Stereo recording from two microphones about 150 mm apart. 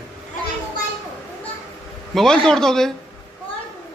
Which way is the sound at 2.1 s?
5° left (ahead or behind).